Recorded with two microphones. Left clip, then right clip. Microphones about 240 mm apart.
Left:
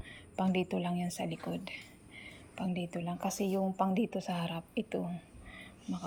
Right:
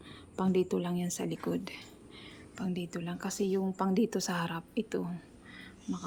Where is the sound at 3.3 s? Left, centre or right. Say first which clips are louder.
Right 5 dB; right.